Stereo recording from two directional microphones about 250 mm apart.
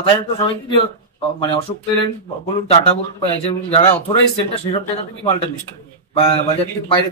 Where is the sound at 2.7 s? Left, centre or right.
Left.